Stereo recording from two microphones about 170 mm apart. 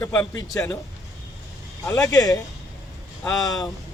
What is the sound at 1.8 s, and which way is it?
A man's voice, 20° left (ahead or behind).